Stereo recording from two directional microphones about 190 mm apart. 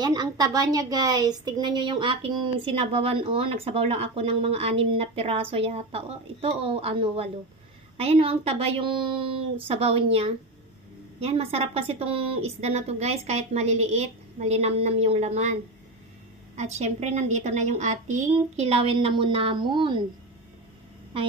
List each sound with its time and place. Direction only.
0.0 s a woman's voice: 20° right (ahead or behind)
11.1 s a woman's voice: 30° right (ahead or behind)
16.5 s a woman's voice: 35° right (ahead or behind)